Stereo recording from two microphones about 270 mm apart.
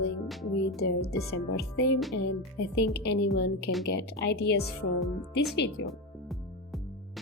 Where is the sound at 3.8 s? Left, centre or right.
Left.